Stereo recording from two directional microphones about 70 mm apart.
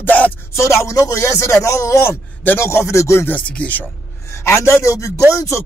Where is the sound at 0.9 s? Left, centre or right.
Left.